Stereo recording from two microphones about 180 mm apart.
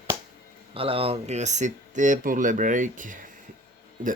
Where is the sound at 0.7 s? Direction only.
30° right (ahead or behind).